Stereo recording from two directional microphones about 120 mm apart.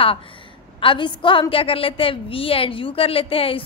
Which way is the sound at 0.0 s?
50° left (ahead or behind).